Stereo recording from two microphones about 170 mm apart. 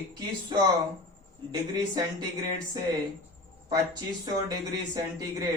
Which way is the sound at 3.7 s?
20° right (ahead or behind).